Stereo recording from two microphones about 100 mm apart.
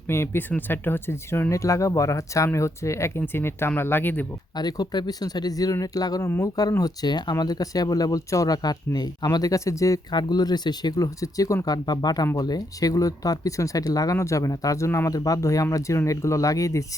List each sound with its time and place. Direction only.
0.1 s speech: 20° left (ahead or behind)
4.5 s speech: 40° left (ahead or behind)
10.1 s speech: 45° left (ahead or behind)